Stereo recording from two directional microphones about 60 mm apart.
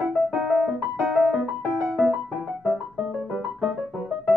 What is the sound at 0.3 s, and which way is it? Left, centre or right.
Music, centre.